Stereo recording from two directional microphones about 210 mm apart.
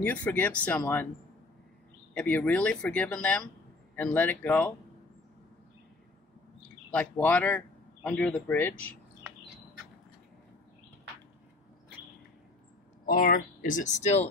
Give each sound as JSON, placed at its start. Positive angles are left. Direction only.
{"t": 0.0, "sound": "speech", "side_deg": 10}
{"t": 2.1, "sound": "speech", "side_deg": 5}
{"t": 6.9, "sound": "speech", "side_deg": 5}
{"t": 13.0, "sound": "speech", "side_deg": 40}